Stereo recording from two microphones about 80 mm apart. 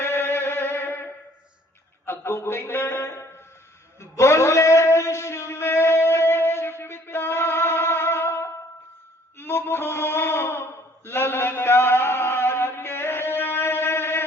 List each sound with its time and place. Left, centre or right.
0.0 s music: left
2.0 s a man's voice: left
4.0 s a sound: left